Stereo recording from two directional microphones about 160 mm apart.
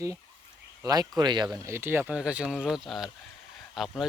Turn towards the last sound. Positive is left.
turn(degrees=0)  # may be behind; listen again after turning